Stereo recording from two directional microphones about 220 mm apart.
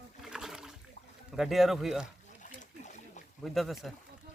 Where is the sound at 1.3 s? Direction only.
Centre (ahead or behind).